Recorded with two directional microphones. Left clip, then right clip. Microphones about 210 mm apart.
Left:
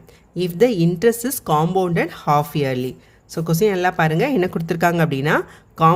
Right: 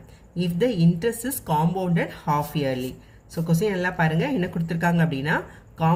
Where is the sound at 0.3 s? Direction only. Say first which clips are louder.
Left 7 dB; 50° left (ahead or behind).